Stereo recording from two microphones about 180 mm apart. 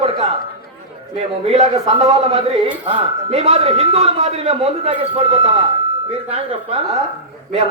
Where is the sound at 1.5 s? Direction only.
35° right (ahead or behind).